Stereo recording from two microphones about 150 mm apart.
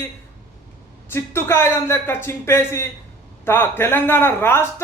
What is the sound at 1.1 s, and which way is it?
A man's voice, 15° left (ahead or behind).